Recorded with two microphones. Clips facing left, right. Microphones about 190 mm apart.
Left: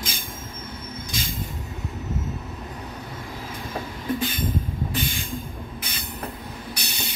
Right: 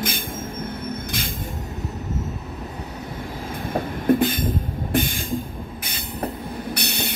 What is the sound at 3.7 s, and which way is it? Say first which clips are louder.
Train: right 9 dB; 55° right (ahead or behind).